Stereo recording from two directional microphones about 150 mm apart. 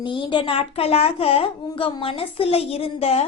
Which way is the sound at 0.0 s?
30° left (ahead or behind).